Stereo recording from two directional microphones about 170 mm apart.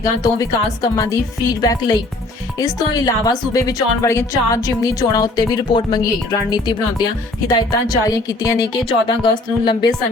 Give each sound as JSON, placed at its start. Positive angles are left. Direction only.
{"t": 0.0, "sound": "speech", "side_deg": 20}